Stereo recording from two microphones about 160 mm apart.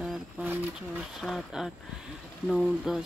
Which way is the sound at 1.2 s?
Centre (ahead or behind).